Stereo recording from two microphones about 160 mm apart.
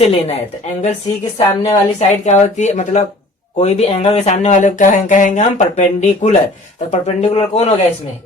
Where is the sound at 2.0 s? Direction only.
45° left (ahead or behind).